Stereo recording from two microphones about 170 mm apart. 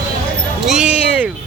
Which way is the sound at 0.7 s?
5° right (ahead or behind).